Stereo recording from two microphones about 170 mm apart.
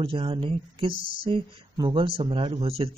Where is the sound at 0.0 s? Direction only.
30° right (ahead or behind).